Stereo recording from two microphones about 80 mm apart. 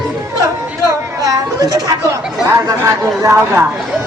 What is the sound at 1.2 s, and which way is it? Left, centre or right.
Speech, right.